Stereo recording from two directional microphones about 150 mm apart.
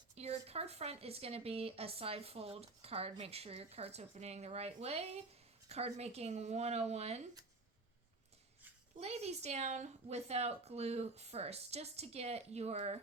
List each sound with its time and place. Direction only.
0.2 s speech: 45° right (ahead or behind)
9.0 s speech: 45° right (ahead or behind)